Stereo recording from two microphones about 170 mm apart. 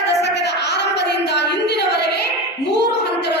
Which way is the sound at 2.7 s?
80° left.